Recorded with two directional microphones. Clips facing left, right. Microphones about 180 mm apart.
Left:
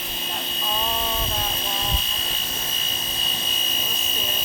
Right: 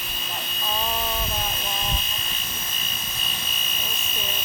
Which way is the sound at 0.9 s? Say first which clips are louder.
Left 1 dB; 25° left (ahead or behind).